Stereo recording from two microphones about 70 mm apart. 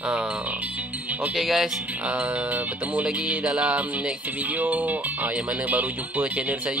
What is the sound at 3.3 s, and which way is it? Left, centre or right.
Music, centre.